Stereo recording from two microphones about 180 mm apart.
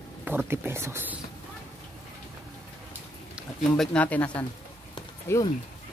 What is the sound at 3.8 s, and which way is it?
Speech, 5° left (ahead or behind).